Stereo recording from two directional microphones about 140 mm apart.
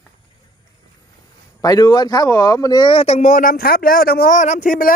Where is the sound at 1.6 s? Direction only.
30° left (ahead or behind).